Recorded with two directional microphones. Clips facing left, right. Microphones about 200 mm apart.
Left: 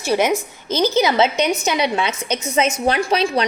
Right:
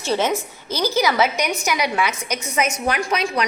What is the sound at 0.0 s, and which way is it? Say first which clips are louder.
A woman's voice: left 3 dB; 10° left (ahead or behind).